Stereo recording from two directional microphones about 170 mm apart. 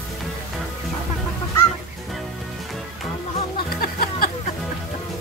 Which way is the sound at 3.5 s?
60° left (ahead or behind).